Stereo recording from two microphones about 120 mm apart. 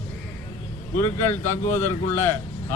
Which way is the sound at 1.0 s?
20° left (ahead or behind).